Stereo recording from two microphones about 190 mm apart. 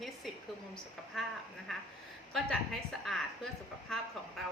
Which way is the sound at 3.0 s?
Centre (ahead or behind).